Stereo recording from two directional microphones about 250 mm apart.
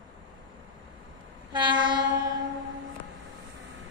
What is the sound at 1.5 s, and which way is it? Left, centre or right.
Train, centre.